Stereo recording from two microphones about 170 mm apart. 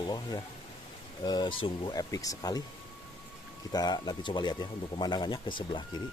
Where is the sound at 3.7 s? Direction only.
25° left (ahead or behind).